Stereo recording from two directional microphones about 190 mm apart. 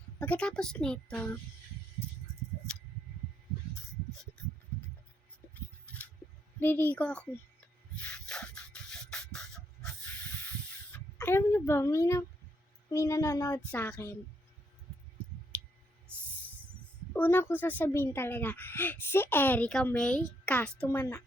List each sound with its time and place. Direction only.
0.2 s speech: 5° left (ahead or behind)
5.5 s scissors: 5° left (ahead or behind)
6.6 s speech: 10° left (ahead or behind)
7.9 s a sound: 5° left (ahead or behind)
12.9 s speech: 15° left (ahead or behind)
17.2 s speech: 10° left (ahead or behind)